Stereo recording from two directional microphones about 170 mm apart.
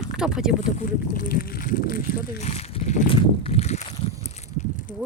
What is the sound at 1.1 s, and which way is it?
Speech, 55° left (ahead or behind).